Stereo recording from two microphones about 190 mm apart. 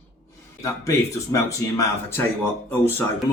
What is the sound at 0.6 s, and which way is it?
Speech, 15° left (ahead or behind).